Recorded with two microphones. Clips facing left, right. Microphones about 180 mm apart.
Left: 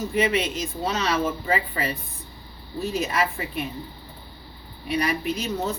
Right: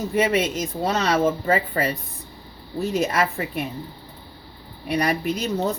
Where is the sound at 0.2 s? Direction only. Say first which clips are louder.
Right 3 dB; 45° right (ahead or behind).